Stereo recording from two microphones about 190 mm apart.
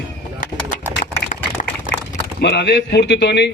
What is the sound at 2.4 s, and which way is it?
A man's voice, 60° left (ahead or behind).